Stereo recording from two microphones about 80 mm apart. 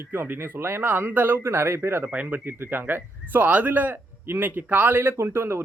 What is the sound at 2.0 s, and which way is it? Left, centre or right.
A man's voice, centre.